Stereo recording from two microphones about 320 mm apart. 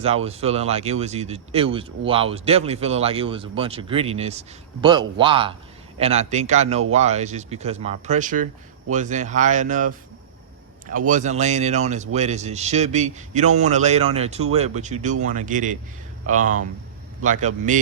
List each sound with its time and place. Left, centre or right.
0.0 s speech: centre
10.9 s speech: right
17.7 s speech: right